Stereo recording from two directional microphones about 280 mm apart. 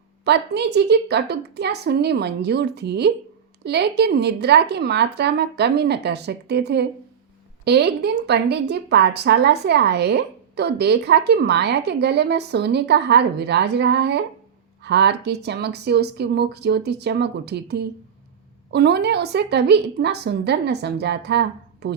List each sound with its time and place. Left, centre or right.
0.3 s a woman's voice: right